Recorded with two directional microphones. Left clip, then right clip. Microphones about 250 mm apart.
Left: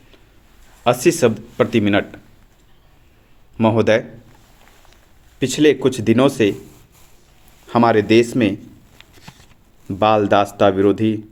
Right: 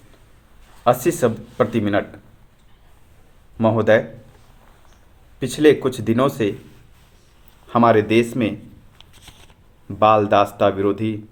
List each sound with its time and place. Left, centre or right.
0.9 s speech: left
3.6 s speech: left
5.4 s speech: left
7.7 s speech: left
9.9 s speech: left